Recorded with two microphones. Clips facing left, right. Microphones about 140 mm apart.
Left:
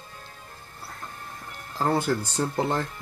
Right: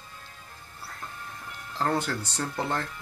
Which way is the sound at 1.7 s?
10° left (ahead or behind).